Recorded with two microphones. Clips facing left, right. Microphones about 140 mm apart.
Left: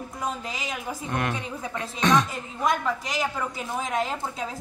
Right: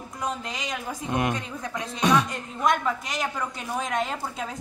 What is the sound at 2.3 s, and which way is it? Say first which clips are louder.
A woman's voice: right 1 dB; centre (ahead or behind).